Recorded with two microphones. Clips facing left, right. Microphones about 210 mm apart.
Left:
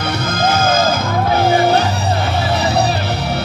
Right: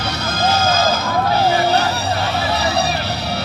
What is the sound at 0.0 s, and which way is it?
Music, 55° left (ahead or behind).